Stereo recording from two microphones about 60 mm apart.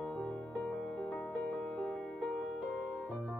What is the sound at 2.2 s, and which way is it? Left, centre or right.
Music, left.